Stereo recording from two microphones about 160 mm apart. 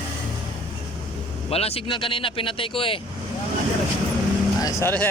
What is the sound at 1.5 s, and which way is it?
Speech, 40° left (ahead or behind).